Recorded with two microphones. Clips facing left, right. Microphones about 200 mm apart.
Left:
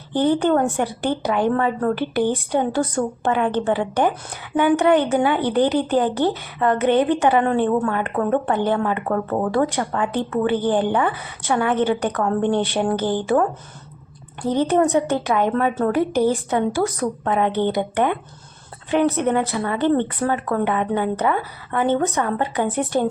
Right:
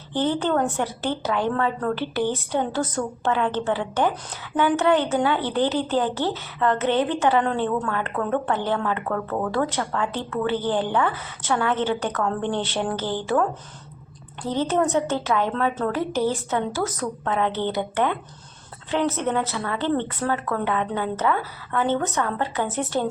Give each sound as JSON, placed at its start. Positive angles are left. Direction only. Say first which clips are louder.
{"t": 0.1, "sound": "a woman's voice", "louder": "left 5 dB", "side_deg": 15}
{"t": 9.1, "sound": "speech", "louder": "left 4 dB", "side_deg": 25}
{"t": 9.5, "sound": "a woman's voice", "louder": "left 4 dB", "side_deg": 15}
{"t": 14.4, "sound": "a woman's voice", "louder": "left 4 dB", "side_deg": 15}